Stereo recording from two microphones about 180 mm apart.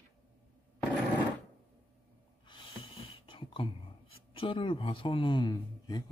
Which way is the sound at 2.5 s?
25° left (ahead or behind).